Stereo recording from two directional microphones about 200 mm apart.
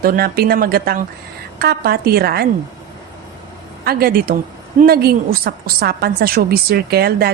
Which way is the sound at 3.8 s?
50° right (ahead or behind).